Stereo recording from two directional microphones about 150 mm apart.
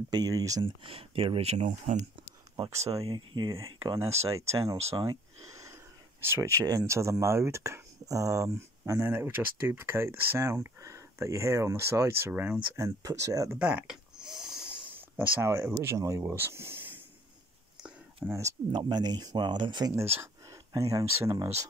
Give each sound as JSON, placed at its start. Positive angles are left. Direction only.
{"t": 0.1, "sound": "speech", "side_deg": -25}
{"t": 2.7, "sound": "speech", "side_deg": -20}
{"t": 4.7, "sound": "speech", "side_deg": -45}
{"t": 5.0, "sound": "a sound", "side_deg": -20}
{"t": 6.2, "sound": "speech", "side_deg": -15}
{"t": 12.7, "sound": "speech", "side_deg": -20}
{"t": 13.6, "sound": "a sound", "side_deg": -10}
{"t": 14.9, "sound": "speech", "side_deg": -10}
{"t": 17.7, "sound": "a sound", "side_deg": -5}
{"t": 18.3, "sound": "speech", "side_deg": -20}